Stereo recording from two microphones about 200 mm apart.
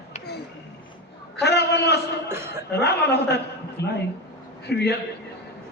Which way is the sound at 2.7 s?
55° left (ahead or behind).